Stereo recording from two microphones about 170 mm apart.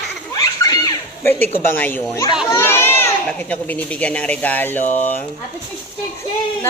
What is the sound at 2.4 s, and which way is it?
Crowd, 15° left (ahead or behind).